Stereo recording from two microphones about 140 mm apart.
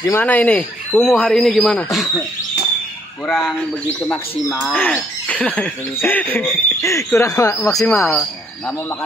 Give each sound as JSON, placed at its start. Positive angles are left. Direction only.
{"t": 0.0, "sound": "speech", "side_deg": 15}
{"t": 3.3, "sound": "speech", "side_deg": 0}
{"t": 4.6, "sound": "speech", "side_deg": 10}